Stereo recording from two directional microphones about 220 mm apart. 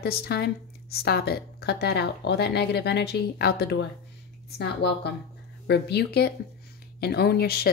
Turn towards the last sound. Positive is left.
turn(degrees=45)  # may be behind; listen again after turning